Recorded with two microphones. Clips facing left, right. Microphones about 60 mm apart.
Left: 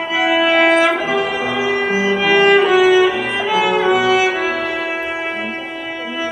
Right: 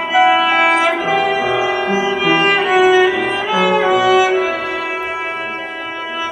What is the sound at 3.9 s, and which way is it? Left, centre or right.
Music, left.